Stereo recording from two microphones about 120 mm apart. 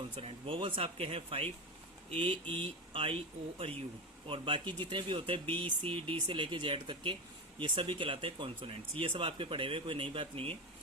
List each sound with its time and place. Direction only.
0.2 s speech: 50° right (ahead or behind)